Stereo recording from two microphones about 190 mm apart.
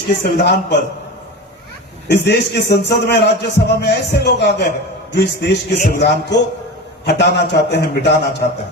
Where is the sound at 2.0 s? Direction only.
60° left (ahead or behind).